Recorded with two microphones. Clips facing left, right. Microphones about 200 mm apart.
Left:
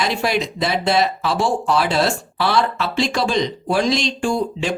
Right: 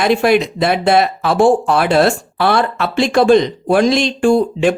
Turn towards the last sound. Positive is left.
turn(degrees=-55)  # may be behind; listen again after turning